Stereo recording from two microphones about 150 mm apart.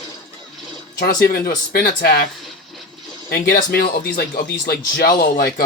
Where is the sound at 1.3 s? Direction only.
85° left.